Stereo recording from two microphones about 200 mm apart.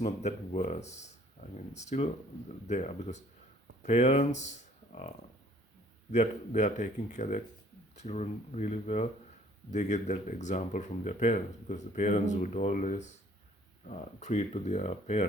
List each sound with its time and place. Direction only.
0.0 s speech: 35° left (ahead or behind)